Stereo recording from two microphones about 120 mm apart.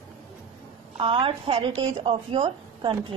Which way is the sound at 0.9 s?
50° right (ahead or behind).